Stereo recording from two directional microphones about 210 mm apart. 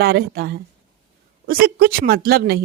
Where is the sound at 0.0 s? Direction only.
45° right (ahead or behind).